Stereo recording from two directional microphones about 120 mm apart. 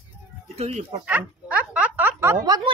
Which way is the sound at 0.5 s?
65° right (ahead or behind).